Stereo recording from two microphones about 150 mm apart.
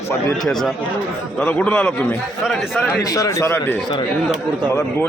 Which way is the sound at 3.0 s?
20° left (ahead or behind).